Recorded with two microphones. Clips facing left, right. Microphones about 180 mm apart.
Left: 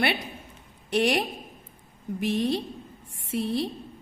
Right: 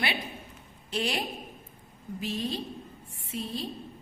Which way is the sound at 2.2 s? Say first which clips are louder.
Left 7 dB; 70° left (ahead or behind).